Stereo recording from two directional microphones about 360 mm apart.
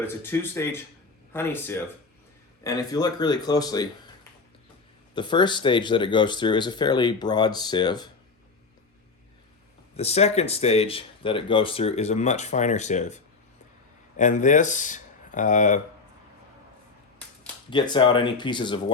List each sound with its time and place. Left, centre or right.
0.0 s speech: centre
9.9 s speech: centre
17.2 s speech: centre